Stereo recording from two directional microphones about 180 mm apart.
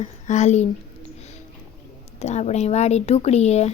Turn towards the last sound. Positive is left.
turn(degrees=35)  # may be behind; listen again after turning